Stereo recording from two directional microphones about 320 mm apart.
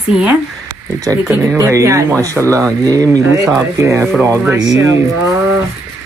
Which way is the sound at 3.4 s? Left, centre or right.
Centre.